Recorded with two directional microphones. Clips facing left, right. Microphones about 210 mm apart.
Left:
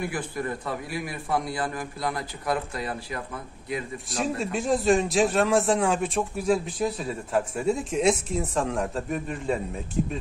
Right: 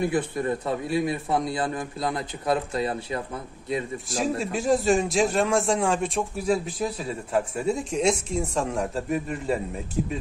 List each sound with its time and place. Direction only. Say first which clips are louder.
0.0 s a man's voice: right 5 dB; 25° right (ahead or behind)
4.2 s a man's voice: right 1 dB; centre (ahead or behind)